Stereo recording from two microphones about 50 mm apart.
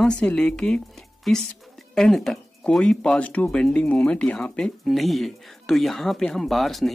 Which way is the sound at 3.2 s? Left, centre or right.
Left.